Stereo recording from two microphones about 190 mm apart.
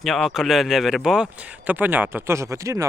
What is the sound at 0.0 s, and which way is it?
Speech, centre (ahead or behind).